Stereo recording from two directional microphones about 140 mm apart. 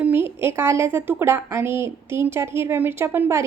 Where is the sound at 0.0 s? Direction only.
15° right (ahead or behind).